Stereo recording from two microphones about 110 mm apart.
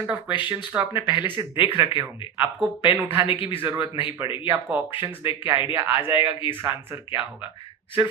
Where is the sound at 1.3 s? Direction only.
50° left (ahead or behind).